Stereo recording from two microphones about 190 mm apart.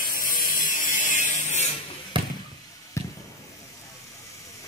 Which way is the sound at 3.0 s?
15° left (ahead or behind).